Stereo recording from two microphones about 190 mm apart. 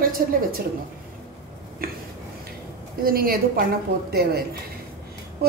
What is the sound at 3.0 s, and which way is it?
A woman's voice, 50° right (ahead or behind).